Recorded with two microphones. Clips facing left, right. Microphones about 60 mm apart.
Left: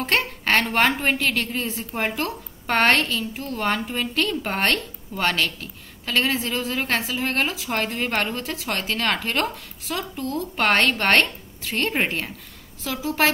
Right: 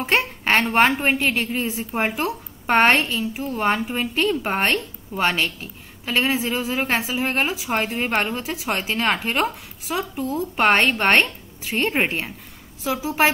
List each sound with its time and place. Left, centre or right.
0.0 s a woman's voice: centre